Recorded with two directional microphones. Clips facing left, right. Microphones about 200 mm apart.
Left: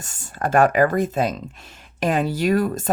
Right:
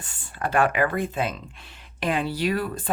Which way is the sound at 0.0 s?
45° left (ahead or behind).